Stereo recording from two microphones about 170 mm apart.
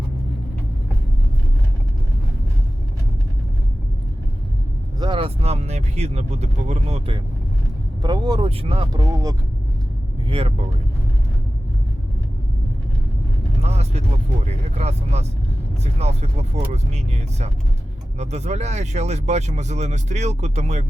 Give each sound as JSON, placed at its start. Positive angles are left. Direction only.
{"t": 4.9, "sound": "speech", "side_deg": -30}
{"t": 8.0, "sound": "speech", "side_deg": -25}
{"t": 10.2, "sound": "speech", "side_deg": -35}
{"t": 13.6, "sound": "vehicle", "side_deg": -40}
{"t": 14.4, "sound": "speech", "side_deg": -40}